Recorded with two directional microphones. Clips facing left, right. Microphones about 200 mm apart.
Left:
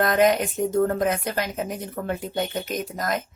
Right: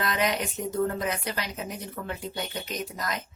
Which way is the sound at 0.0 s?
50° left (ahead or behind).